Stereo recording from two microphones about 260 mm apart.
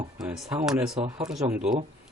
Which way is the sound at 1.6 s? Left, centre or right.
Right.